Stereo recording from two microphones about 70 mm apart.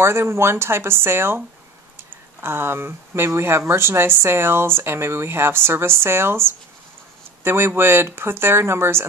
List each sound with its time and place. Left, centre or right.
0.0 s speech: right
2.4 s speech: right